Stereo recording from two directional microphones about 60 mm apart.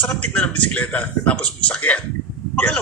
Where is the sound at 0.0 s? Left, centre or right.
Centre.